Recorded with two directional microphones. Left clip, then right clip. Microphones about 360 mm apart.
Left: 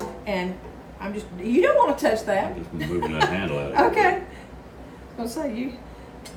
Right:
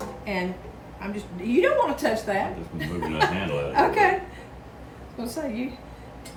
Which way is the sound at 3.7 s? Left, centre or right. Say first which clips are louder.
Left 1 dB; centre.